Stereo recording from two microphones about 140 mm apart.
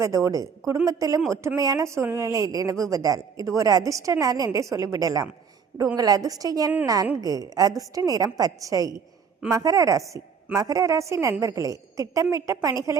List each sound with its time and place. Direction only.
0.0 s a woman's voice: 25° right (ahead or behind)